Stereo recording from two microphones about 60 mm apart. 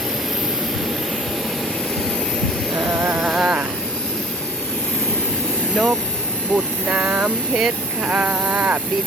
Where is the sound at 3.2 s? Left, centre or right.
Centre.